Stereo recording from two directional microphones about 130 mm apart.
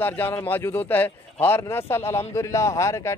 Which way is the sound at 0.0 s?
15° left (ahead or behind).